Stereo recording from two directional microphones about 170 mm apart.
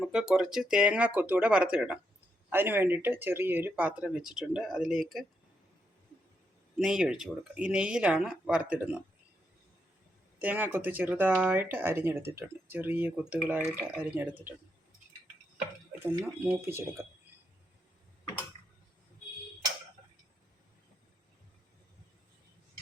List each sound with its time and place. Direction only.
0.0 s speech: 5° right (ahead or behind)
6.7 s speech: 5° right (ahead or behind)
10.3 s speech: 10° right (ahead or behind)
16.0 s speech: 15° right (ahead or behind)